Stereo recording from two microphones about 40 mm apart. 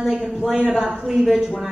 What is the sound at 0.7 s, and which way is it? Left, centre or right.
Speech, centre.